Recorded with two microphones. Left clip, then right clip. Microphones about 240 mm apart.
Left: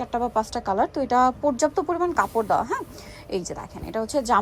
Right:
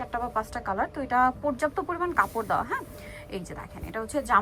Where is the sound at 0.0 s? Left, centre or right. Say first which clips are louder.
Left 5 dB; centre.